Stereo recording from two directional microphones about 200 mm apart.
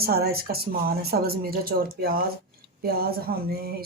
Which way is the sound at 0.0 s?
50° right (ahead or behind).